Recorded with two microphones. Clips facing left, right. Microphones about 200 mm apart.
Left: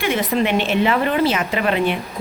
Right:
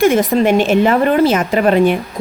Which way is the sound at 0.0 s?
45° right (ahead or behind).